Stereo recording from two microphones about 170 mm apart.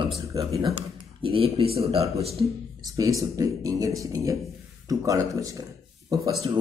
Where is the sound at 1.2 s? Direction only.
35° right (ahead or behind).